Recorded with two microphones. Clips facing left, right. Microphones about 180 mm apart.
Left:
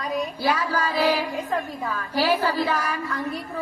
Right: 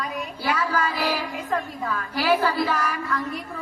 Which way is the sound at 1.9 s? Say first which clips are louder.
Even; 35° left (ahead or behind).